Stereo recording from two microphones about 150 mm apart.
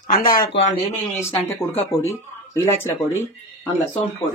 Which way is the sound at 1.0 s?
15° left (ahead or behind).